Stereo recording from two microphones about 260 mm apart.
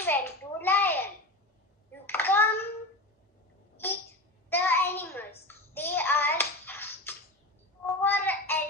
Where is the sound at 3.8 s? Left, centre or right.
Centre.